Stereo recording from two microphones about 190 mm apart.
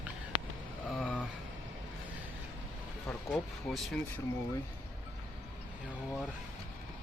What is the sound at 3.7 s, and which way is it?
Speech, centre (ahead or behind).